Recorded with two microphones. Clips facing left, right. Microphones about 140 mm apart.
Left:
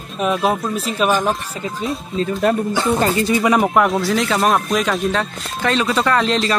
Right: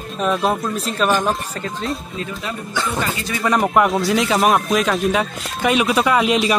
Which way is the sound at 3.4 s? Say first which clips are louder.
Right 2 dB; 5° left (ahead or behind).